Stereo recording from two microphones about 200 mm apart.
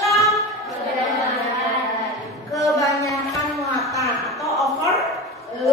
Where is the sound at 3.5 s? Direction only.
Centre (ahead or behind).